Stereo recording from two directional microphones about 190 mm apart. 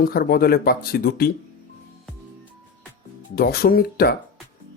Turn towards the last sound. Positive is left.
turn(degrees=55)  # may be behind; listen again after turning